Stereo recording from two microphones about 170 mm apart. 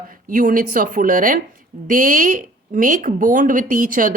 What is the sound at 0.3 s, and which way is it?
A woman's voice, 55° right (ahead or behind).